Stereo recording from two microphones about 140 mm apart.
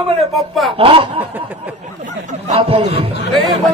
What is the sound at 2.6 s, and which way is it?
Speech, 45° right (ahead or behind).